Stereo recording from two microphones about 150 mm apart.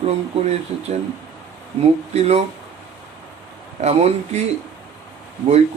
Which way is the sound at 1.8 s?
45° right (ahead or behind).